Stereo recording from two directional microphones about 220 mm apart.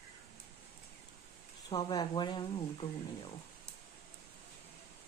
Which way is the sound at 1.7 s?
20° left (ahead or behind).